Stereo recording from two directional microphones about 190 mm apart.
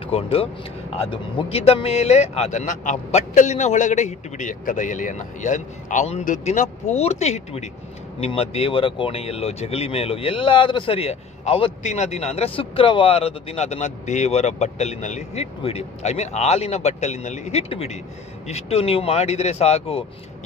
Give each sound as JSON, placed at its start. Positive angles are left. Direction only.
{"t": 0.0, "sound": "speech", "side_deg": 30}